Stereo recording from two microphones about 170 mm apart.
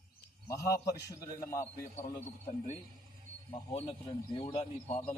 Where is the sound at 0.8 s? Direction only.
20° left (ahead or behind).